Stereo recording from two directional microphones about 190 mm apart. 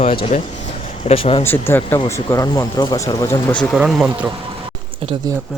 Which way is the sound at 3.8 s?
5° right (ahead or behind).